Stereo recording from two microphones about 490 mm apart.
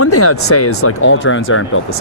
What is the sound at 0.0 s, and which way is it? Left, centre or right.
Speech, left.